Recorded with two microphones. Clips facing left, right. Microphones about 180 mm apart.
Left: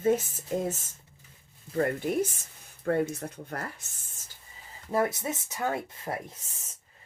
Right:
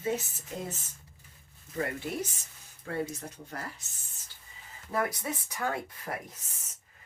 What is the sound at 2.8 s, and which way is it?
Speech, 55° left (ahead or behind).